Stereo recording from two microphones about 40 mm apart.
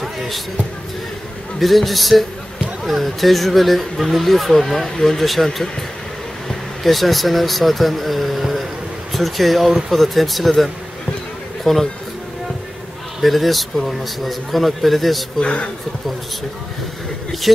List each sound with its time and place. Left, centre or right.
1.6 s speech: centre
6.8 s speech: centre
9.7 s speech: centre
9.9 s speech: centre
11.7 s a man's voice: centre
13.2 s speech: centre
15.4 s speech: left